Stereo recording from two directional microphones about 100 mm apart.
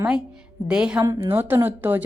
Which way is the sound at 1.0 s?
25° right (ahead or behind).